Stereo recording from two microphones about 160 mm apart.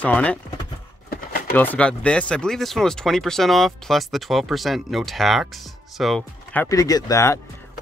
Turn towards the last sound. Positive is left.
turn(degrees=20)  # may be behind; listen again after turning